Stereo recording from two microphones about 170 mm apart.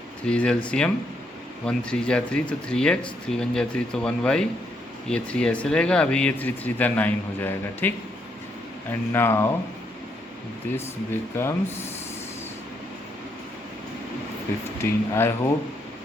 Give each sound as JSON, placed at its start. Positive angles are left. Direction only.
{"t": 0.3, "sound": "speech", "side_deg": 5}
{"t": 10.8, "sound": "speech", "side_deg": 15}
{"t": 14.8, "sound": "speech", "side_deg": 15}